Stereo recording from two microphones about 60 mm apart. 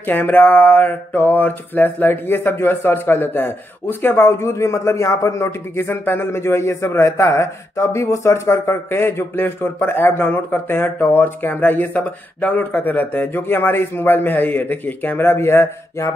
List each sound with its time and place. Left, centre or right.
0.0 s speech: left
5.8 s a man's voice: left
9.4 s speech: left